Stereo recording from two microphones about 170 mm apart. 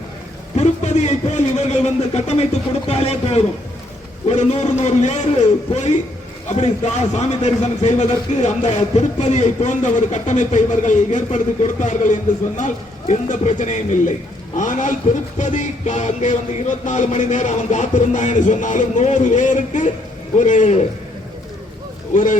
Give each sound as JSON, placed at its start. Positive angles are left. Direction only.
{"t": 0.5, "sound": "a man's voice", "side_deg": 40}
{"t": 22.1, "sound": "a man's voice", "side_deg": 50}